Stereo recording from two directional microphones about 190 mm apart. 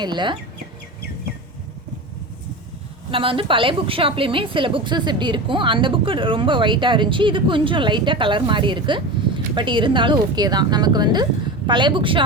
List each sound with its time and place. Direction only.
0.0 s a woman's voice: 25° right (ahead or behind)
3.1 s a woman's voice: 25° right (ahead or behind)